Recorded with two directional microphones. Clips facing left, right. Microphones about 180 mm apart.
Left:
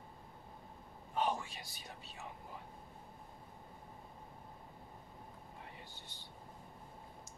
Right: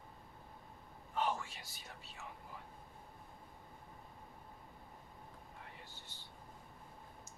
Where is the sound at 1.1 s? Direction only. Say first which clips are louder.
Left 1 dB; 15° left (ahead or behind).